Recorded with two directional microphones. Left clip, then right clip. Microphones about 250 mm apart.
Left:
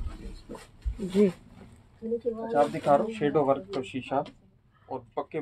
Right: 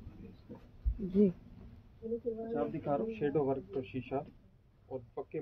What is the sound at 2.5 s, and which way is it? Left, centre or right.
Speech, left.